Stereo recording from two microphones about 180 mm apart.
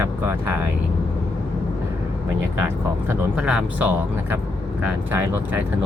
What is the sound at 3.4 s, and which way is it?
Speech, 5° right (ahead or behind).